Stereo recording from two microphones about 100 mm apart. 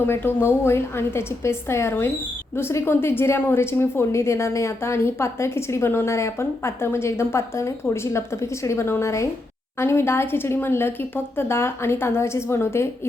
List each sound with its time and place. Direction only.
0.0 s a woman's voice: 20° left (ahead or behind)